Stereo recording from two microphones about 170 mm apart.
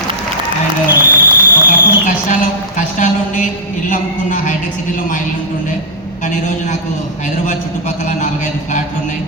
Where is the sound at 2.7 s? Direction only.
45° left (ahead or behind).